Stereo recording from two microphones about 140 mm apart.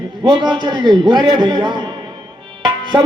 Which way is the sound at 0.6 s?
35° right (ahead or behind).